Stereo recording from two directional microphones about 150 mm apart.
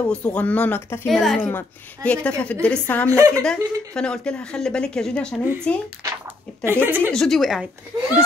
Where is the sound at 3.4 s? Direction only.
5° left (ahead or behind).